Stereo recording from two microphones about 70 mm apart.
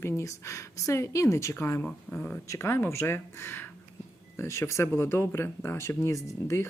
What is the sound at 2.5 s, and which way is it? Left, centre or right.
Speech, left.